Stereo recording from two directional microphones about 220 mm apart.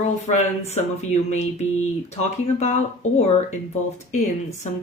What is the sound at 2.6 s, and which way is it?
Speech, 30° left (ahead or behind).